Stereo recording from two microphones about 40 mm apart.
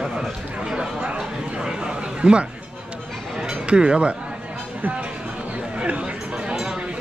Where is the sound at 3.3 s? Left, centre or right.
Right.